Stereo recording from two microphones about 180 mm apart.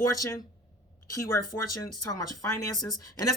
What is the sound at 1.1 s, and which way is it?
Speech, 20° left (ahead or behind).